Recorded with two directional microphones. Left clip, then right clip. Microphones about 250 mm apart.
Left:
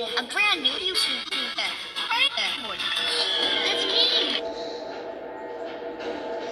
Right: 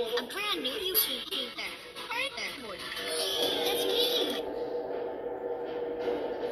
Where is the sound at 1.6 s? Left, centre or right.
Left.